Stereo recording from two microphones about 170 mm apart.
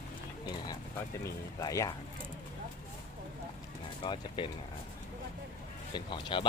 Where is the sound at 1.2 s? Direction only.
20° left (ahead or behind).